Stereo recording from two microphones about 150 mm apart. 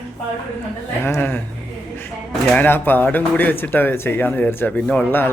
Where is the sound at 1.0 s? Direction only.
15° left (ahead or behind).